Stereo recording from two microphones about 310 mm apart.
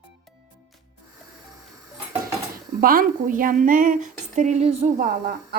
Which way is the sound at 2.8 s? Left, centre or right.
Right.